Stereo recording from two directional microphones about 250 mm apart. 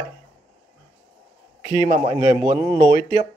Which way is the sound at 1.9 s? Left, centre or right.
Centre.